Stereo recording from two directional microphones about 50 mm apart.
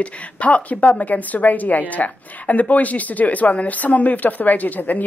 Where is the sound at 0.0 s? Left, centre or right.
Left.